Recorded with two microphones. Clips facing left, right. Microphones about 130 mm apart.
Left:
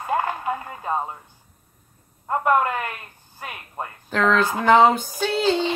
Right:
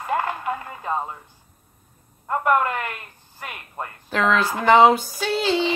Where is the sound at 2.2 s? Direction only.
20° left (ahead or behind).